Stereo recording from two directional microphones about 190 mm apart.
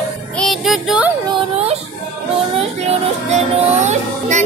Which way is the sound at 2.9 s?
35° right (ahead or behind).